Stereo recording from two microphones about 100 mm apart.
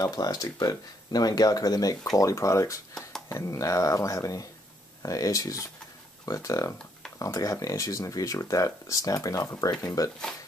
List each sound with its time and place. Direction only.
0.0 s speech: 40° left (ahead or behind)